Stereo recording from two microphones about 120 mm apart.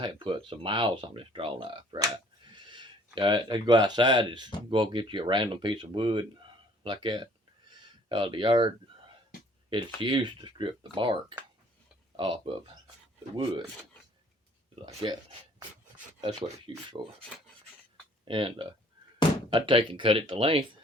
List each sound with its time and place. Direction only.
0.0 s speech: 45° right (ahead or behind)
15.0 s speech: 35° right (ahead or behind)
18.3 s speech: 45° right (ahead or behind)